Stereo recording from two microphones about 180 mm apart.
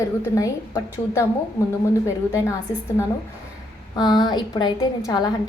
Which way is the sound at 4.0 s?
25° left (ahead or behind).